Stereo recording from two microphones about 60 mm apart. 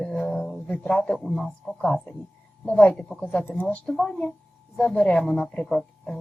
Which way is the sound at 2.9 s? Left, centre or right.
Centre.